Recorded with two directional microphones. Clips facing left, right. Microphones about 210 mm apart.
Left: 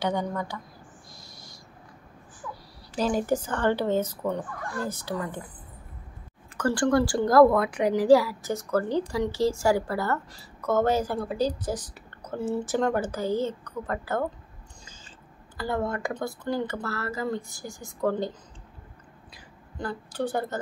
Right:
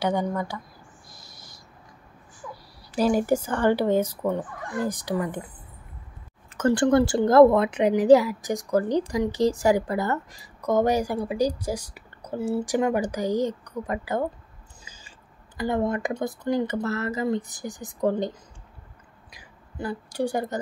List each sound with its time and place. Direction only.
0.0 s a woman's voice: 10° right (ahead or behind)
1.1 s owl: centre (ahead or behind)
2.9 s a woman's voice: 10° right (ahead or behind)
6.5 s a woman's voice: 20° right (ahead or behind)
19.3 s a sound: 10° right (ahead or behind)